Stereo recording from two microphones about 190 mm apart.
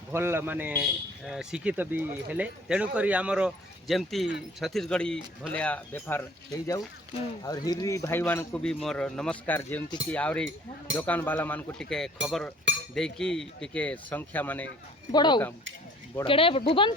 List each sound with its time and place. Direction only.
0.1 s speech: 10° right (ahead or behind); by 14.7 s 10° left (ahead or behind)
15.1 s speech: 25° left (ahead or behind)